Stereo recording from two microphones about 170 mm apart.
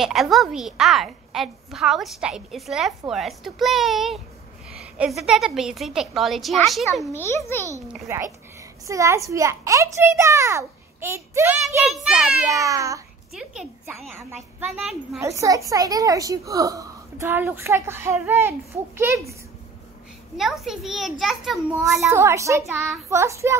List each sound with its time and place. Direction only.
0.0 s a woman's voice: centre (ahead or behind)
7.1 s a child's voice: 15° left (ahead or behind)
8.1 s a child's voice: 15° right (ahead or behind)
11.9 s a woman's voice: 5° right (ahead or behind)
12.4 s babbling: 20° right (ahead or behind)
13.3 s a woman's voice: 5° right (ahead or behind)
15.1 s a child's voice: 15° right (ahead or behind)
20.6 s a woman's voice: centre (ahead or behind)
22.1 s a child's voice: 15° right (ahead or behind)